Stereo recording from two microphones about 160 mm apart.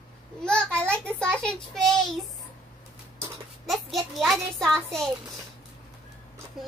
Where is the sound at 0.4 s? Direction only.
5° left (ahead or behind).